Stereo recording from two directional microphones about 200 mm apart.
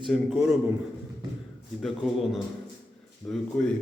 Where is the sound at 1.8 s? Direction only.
Centre (ahead or behind).